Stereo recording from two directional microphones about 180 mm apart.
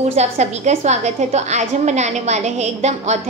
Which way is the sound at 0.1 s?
40° right (ahead or behind).